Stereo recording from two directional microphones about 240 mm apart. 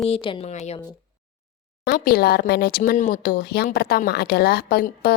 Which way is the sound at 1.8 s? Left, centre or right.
Left.